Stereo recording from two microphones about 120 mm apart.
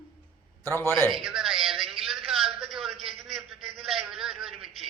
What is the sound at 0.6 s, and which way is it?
Speech, 20° left (ahead or behind).